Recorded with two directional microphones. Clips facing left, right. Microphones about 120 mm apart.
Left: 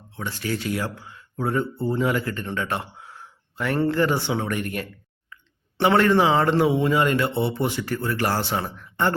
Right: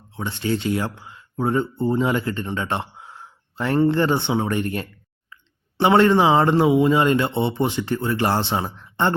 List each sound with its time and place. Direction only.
0.2 s a man's voice: 25° right (ahead or behind)